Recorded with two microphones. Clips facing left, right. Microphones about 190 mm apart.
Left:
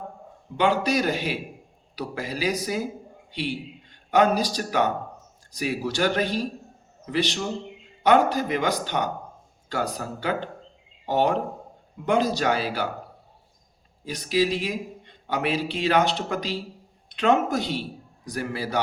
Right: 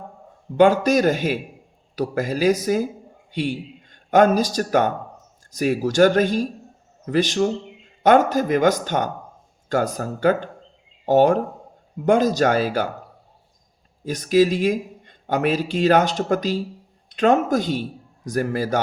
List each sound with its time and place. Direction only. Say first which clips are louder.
0.5 s a man's voice: right 7 dB; 45° right (ahead or behind)
14.0 s a man's voice: right 7 dB; 45° right (ahead or behind)